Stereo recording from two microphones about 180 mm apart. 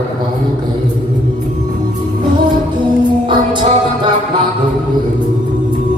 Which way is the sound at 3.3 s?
25° right (ahead or behind).